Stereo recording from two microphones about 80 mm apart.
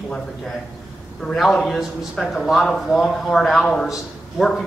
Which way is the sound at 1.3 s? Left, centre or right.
Centre.